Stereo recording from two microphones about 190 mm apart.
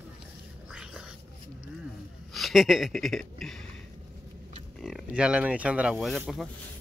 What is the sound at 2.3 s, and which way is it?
Speech, centre (ahead or behind).